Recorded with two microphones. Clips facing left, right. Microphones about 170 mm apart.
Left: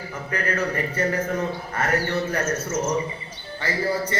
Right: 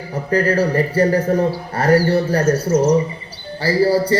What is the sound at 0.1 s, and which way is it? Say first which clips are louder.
Speech: right 11 dB; 35° right (ahead or behind).